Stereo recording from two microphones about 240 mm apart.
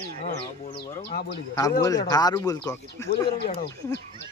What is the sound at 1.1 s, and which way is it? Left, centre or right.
Speech, left.